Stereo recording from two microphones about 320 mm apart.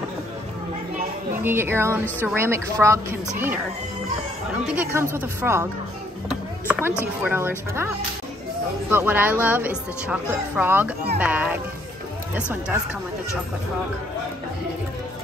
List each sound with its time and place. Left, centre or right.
1.4 s speech: centre
4.6 s speech: centre
7.2 s speech: centre
8.9 s speech: centre